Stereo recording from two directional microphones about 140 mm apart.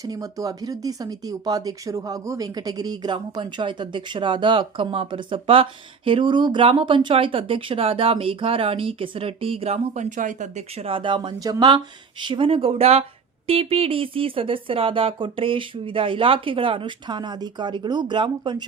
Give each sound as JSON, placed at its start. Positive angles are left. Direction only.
{"t": 0.0, "sound": "speech", "side_deg": -25}